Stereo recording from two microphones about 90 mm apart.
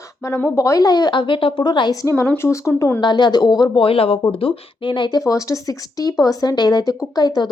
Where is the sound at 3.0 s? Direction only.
55° left (ahead or behind).